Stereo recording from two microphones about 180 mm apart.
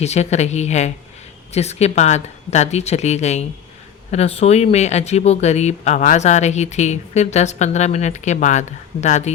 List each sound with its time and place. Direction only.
0.0 s speech: 35° left (ahead or behind)